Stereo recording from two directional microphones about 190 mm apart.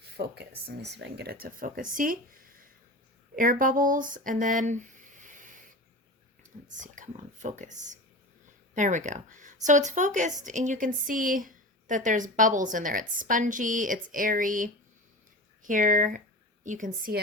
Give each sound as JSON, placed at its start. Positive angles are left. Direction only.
{"t": 0.0, "sound": "speech", "side_deg": -60}
{"t": 3.3, "sound": "speech", "side_deg": -45}
{"t": 6.7, "sound": "speech", "side_deg": -40}